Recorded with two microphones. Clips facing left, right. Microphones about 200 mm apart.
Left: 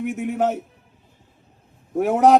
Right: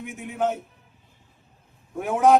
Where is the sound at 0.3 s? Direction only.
40° left (ahead or behind).